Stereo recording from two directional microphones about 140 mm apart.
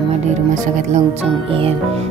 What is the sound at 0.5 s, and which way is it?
Speech, 55° right (ahead or behind).